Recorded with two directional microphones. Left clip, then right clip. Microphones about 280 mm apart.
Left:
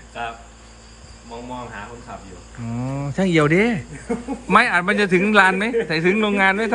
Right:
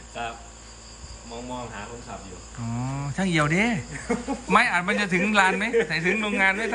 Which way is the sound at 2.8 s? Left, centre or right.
Centre.